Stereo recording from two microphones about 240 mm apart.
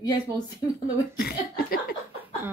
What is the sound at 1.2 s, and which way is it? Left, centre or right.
Speech, left.